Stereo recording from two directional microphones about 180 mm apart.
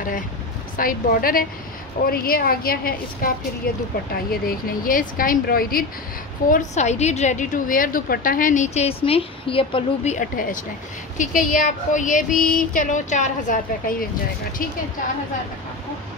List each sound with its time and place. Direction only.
0.7 s a woman's voice: 50° left (ahead or behind)
6.5 s a woman's voice: 40° left (ahead or behind)
10.1 s a woman's voice: 50° left (ahead or behind)